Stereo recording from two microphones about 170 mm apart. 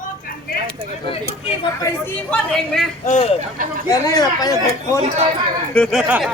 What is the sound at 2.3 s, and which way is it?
Speech, 5° left (ahead or behind).